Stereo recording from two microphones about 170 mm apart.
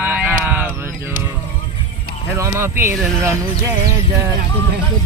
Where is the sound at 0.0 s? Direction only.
10° right (ahead or behind).